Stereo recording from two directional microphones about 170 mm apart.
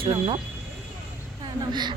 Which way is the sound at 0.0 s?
35° right (ahead or behind).